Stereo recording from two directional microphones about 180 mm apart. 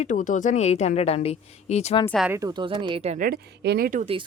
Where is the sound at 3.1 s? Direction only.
55° right (ahead or behind).